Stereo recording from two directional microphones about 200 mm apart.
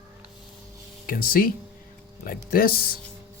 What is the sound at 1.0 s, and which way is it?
Speech, 45° left (ahead or behind).